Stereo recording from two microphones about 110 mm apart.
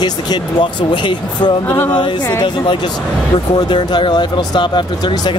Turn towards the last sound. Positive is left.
turn(degrees=45)  # may be behind; listen again after turning